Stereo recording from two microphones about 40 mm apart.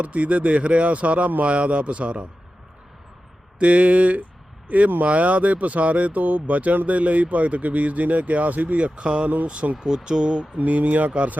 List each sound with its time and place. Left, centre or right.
0.0 s a man's voice: right
3.6 s speech: right
9.0 s a man's voice: right
10.6 s speech: right